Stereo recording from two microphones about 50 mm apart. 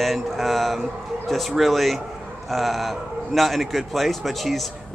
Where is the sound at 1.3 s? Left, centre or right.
Centre.